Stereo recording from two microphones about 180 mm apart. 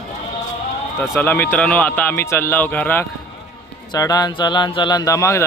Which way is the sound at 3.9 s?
20° left (ahead or behind).